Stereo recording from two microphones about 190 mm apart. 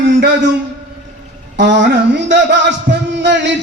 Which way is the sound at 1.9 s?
65° right (ahead or behind).